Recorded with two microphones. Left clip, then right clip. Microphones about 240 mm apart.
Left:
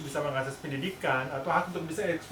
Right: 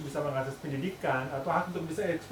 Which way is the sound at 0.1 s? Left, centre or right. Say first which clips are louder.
Left 1 dB; centre.